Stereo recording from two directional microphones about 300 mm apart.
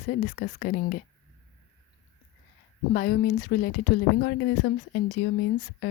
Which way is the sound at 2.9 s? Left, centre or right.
Left.